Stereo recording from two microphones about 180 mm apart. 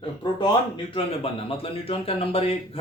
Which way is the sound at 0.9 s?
30° left (ahead or behind).